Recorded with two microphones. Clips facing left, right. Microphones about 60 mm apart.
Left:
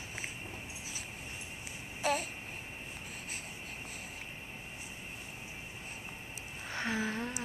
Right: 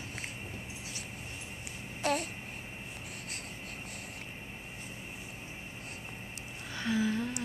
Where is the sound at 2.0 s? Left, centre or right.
Centre.